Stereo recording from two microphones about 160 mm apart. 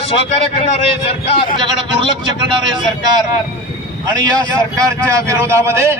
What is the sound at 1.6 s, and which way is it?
Speech, 30° right (ahead or behind).